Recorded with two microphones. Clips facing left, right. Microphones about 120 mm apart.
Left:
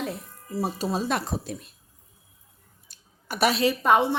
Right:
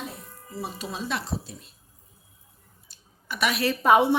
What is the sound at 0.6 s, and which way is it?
A woman's voice, 40° left (ahead or behind).